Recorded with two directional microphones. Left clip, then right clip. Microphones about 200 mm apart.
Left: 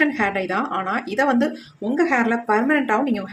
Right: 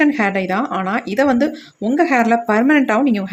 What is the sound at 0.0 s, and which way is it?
A woman's voice, 35° right (ahead or behind).